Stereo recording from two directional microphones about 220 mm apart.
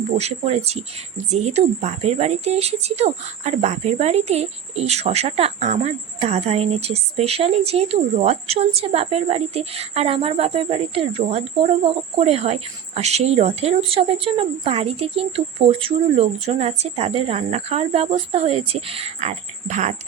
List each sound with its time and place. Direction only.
0.2 s a woman's voice: 30° right (ahead or behind)